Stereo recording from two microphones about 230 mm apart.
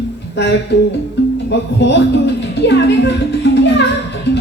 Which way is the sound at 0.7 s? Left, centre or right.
Left.